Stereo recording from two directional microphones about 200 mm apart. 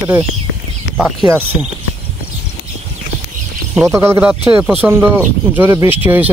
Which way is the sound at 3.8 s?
15° right (ahead or behind).